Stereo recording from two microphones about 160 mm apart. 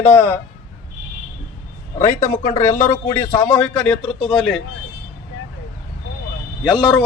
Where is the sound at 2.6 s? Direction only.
15° left (ahead or behind).